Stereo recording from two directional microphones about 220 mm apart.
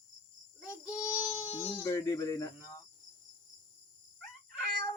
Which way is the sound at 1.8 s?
15° left (ahead or behind).